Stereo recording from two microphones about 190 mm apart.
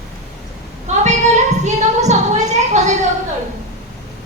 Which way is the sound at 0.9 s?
35° right (ahead or behind).